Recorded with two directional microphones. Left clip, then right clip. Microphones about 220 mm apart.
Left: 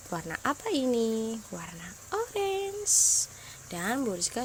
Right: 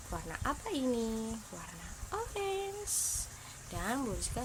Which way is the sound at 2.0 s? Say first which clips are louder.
Left 7 dB; 25° left (ahead or behind).